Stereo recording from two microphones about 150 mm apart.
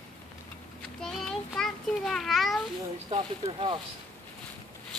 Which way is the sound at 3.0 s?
40° right (ahead or behind).